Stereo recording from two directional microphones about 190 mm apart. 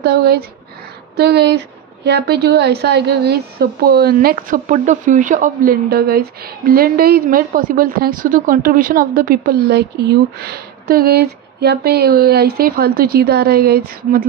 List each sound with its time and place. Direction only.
0.0 s a woman's voice: 60° right (ahead or behind)